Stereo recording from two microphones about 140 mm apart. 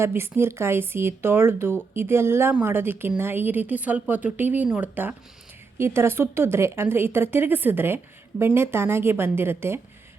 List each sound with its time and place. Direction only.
0.0 s speech: 15° right (ahead or behind)